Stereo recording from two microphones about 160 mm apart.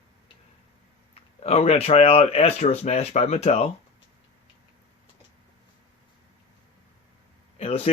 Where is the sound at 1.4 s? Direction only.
40° left (ahead or behind).